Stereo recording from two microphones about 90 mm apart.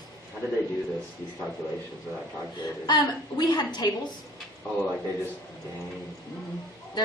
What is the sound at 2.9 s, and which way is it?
Speech, 50° left (ahead or behind).